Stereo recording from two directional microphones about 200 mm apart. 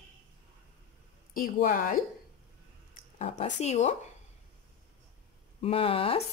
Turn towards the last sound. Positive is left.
turn(degrees=30)  # may be behind; listen again after turning